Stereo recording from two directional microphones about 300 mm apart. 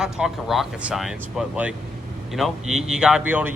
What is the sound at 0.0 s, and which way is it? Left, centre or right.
Speech, centre.